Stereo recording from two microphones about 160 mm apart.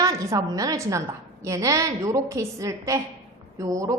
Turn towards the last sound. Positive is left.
turn(degrees=-20)  # may be behind; listen again after turning